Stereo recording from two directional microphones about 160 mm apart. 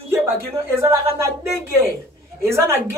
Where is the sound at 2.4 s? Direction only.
15° right (ahead or behind).